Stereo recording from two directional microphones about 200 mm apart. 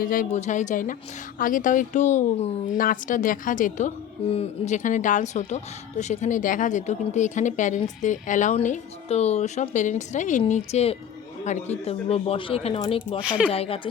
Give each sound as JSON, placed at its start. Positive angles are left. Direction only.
{"t": 0.0, "sound": "speech", "side_deg": 45}
{"t": 13.2, "sound": "speech", "side_deg": -5}
{"t": 13.5, "sound": "speech", "side_deg": 30}